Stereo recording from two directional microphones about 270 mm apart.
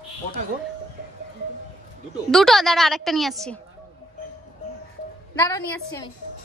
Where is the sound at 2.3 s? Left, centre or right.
Centre.